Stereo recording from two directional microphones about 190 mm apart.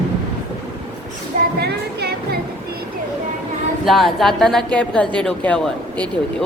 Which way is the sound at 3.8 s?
Centre (ahead or behind).